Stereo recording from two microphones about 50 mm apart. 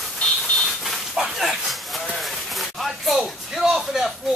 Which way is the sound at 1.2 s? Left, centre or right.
Centre.